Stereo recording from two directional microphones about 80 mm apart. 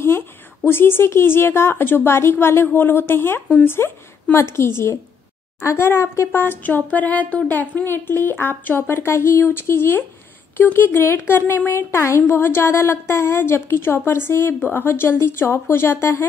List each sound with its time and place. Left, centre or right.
0.7 s a woman's voice: left